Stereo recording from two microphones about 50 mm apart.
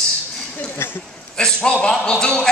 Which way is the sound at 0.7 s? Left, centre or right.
Left.